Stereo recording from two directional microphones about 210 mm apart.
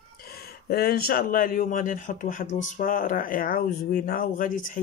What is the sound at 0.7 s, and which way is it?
Speech, 45° left (ahead or behind).